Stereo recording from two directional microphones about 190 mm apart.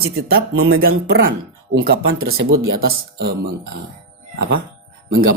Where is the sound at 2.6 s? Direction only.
75° right (ahead or behind).